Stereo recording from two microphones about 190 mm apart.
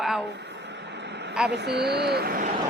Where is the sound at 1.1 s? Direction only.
65° right (ahead or behind).